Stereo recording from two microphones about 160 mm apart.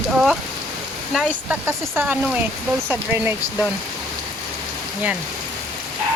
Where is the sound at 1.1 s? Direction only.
10° right (ahead or behind).